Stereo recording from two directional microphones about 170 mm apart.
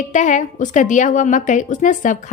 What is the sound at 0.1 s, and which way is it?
A woman's voice, 45° left (ahead or behind).